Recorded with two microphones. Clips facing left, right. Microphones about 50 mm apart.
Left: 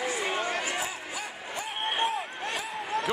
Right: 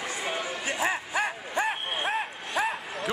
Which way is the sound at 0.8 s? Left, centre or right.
Right.